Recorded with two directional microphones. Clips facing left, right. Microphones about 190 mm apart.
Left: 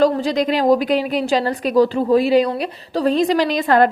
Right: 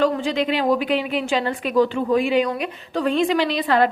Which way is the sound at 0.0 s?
40° left (ahead or behind).